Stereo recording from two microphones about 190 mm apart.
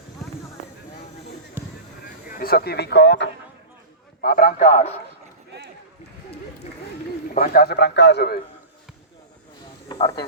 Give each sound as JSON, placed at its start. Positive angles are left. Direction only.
{"t": 2.0, "sound": "speech", "side_deg": 50}
{"t": 4.2, "sound": "a man's voice", "side_deg": 50}
{"t": 7.3, "sound": "a man's voice", "side_deg": 50}
{"t": 9.9, "sound": "speech", "side_deg": 20}